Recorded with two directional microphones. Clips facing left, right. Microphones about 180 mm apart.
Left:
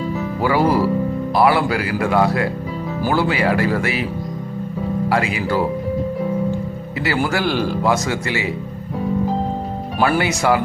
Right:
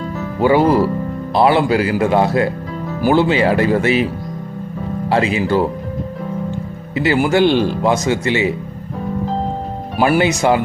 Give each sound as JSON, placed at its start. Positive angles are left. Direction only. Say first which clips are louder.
{"t": 0.4, "sound": "speech", "louder": "right 4 dB", "side_deg": -25}
{"t": 5.0, "sound": "speech", "louder": "right 6 dB", "side_deg": -25}
{"t": 7.0, "sound": "speech", "louder": "right 7 dB", "side_deg": -20}
{"t": 10.0, "sound": "speech", "louder": "right 4 dB", "side_deg": -20}